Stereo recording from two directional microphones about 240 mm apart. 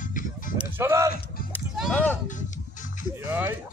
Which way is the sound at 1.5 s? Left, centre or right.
Centre.